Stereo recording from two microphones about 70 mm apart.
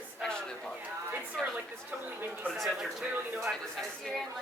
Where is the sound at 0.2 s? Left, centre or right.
Centre.